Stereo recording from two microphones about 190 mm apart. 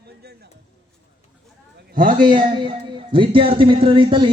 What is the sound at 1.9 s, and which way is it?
Speech, 45° right (ahead or behind).